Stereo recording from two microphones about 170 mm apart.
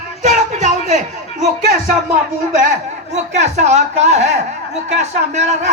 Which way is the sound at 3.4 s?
45° right (ahead or behind).